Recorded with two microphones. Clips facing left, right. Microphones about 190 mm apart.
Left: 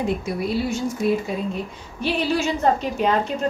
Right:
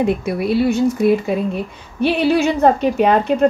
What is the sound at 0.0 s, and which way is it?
Speech, 65° right (ahead or behind).